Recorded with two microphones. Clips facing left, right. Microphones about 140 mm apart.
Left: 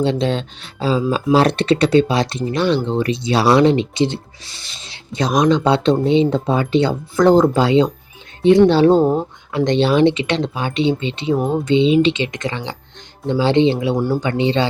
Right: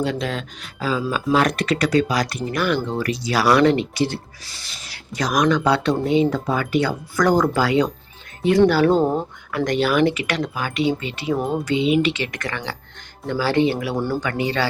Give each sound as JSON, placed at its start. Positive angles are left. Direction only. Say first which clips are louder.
{"t": 0.0, "sound": "speech", "louder": "left 6 dB", "side_deg": 25}
{"t": 9.0, "sound": "speech", "louder": "left 4 dB", "side_deg": 10}
{"t": 9.5, "sound": "speech", "louder": "left 4 dB", "side_deg": 25}